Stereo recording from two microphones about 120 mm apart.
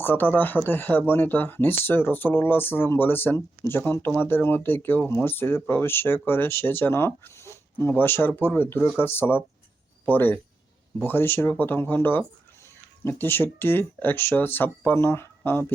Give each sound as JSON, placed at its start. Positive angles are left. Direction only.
{"t": 0.0, "sound": "speech", "side_deg": 15}